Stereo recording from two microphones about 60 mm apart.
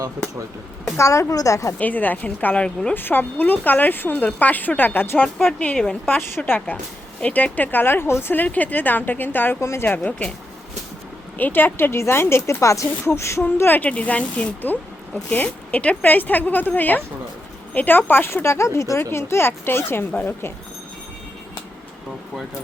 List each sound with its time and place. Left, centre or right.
0.9 s a woman's voice: left
1.3 s a woman's voice: left
1.8 s a woman's voice: left
6.1 s speech: left
8.3 s speech: left
9.6 s a woman's voice: left
9.8 s speech: left
10.1 s speech: left
11.3 s a woman's voice: left
13.7 s a woman's voice: left